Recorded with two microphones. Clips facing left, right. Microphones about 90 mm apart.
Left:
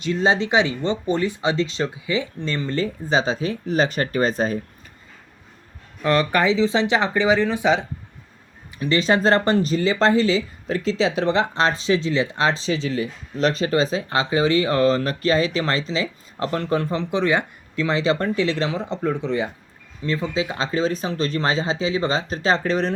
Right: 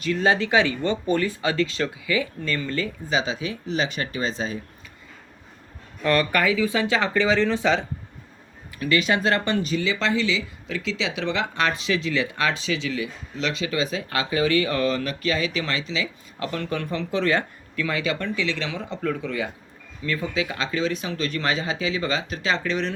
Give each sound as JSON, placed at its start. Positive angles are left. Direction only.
{"t": 0.0, "sound": "speech", "side_deg": 25}
{"t": 6.0, "sound": "speech", "side_deg": 20}
{"t": 8.8, "sound": "speech", "side_deg": 30}
{"t": 17.2, "sound": "speech", "side_deg": 15}
{"t": 17.8, "sound": "speech", "side_deg": 30}